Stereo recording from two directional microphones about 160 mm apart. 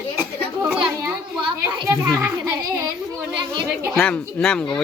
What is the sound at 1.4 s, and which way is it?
A child's voice, 30° right (ahead or behind).